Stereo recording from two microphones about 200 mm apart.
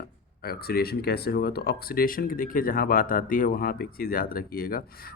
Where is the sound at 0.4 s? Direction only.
50° left (ahead or behind).